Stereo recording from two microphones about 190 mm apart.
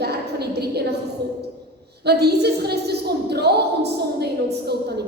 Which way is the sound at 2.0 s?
60° right (ahead or behind).